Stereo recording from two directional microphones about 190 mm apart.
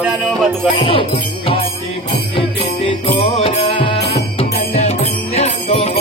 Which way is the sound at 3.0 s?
30° left (ahead or behind).